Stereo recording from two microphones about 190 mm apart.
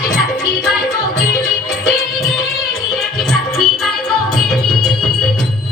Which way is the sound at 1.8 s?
Centre (ahead or behind).